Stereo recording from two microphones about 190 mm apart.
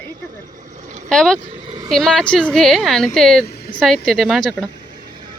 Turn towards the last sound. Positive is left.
turn(degrees=5)  # may be behind; listen again after turning